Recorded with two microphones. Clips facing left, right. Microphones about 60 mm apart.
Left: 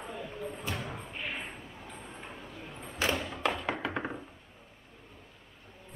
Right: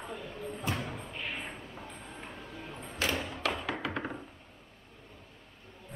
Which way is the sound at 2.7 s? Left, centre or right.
Centre.